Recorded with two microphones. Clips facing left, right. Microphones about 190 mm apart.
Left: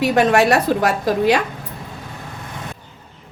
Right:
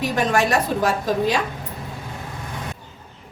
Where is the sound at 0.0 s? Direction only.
70° left (ahead or behind).